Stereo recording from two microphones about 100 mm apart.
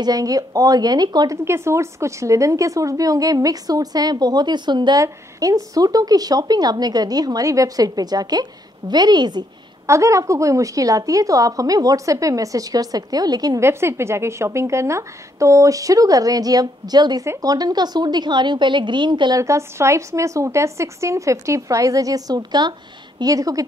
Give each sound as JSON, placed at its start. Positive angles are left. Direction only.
{"t": 0.0, "sound": "speech", "side_deg": -35}
{"t": 1.4, "sound": "speech", "side_deg": -25}
{"t": 5.0, "sound": "a woman's voice", "side_deg": -35}
{"t": 9.8, "sound": "speech", "side_deg": -30}
{"t": 13.6, "sound": "a woman's voice", "side_deg": -25}
{"t": 19.4, "sound": "speech", "side_deg": -30}